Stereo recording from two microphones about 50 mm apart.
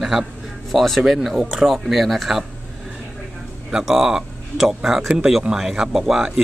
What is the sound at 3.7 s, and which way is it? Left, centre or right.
Speech, centre.